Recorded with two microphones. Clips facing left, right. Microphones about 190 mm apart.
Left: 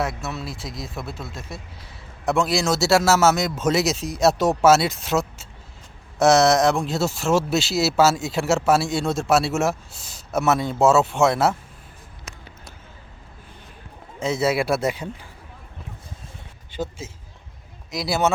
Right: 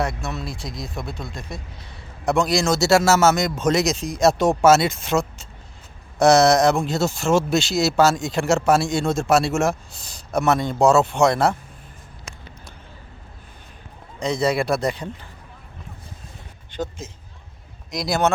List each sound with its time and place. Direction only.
0.0 s speech: centre (ahead or behind)
12.3 s a sound: 30° right (ahead or behind)
14.2 s a man's voice: 5° left (ahead or behind)
16.7 s a man's voice: 5° left (ahead or behind)